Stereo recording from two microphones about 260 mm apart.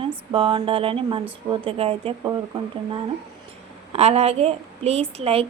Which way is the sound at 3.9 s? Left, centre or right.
Right.